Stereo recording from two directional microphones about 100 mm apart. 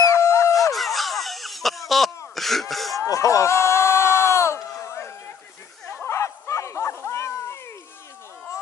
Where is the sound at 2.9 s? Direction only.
35° left (ahead or behind).